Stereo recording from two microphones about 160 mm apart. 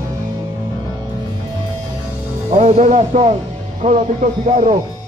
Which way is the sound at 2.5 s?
50° right (ahead or behind).